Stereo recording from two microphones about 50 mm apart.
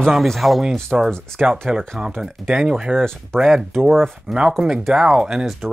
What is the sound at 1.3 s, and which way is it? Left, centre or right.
Speech, centre.